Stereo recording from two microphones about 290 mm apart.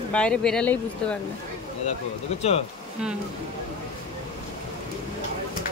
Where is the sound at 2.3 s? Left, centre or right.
Left.